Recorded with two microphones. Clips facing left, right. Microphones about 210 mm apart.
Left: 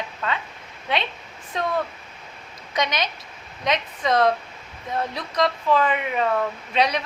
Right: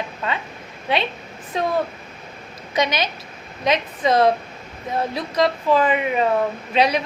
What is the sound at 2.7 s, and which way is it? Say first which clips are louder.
A woman's voice: right 4 dB; 5° right (ahead or behind).